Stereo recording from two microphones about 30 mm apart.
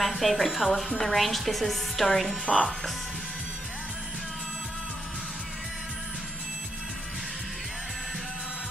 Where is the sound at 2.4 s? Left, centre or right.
Centre.